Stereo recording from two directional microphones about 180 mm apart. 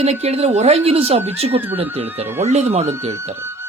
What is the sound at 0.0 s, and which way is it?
Speech, 35° right (ahead or behind).